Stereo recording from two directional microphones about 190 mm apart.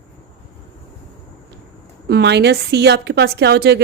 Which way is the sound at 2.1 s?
60° right (ahead or behind).